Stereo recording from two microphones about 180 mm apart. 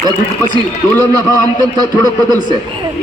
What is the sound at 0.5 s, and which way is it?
Speech, 20° right (ahead or behind).